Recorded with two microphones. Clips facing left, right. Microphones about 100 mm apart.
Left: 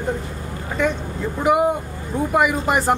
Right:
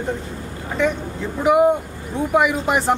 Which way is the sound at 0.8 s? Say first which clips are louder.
Right 1 dB; 5° left (ahead or behind).